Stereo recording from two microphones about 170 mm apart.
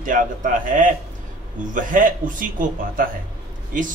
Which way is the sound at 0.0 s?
50° right (ahead or behind).